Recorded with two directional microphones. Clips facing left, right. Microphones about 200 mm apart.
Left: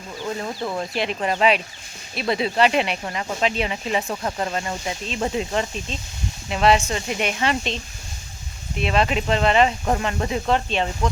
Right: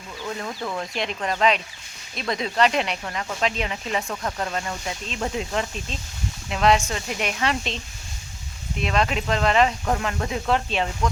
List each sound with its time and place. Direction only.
0.3 s speech: 15° left (ahead or behind)
3.4 s speech: 5° left (ahead or behind)
4.1 s speech: 15° left (ahead or behind); by 7.8 s centre (ahead or behind)
8.8 s speech: 5° left (ahead or behind)